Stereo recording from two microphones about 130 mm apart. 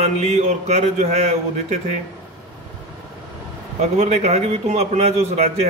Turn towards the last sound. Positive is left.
turn(degrees=-55)  # may be behind; listen again after turning